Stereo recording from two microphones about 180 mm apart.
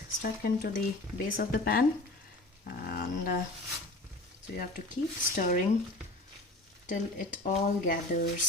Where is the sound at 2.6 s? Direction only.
55° left (ahead or behind).